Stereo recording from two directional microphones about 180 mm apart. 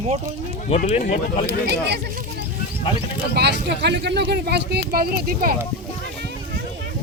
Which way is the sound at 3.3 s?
70° right (ahead or behind).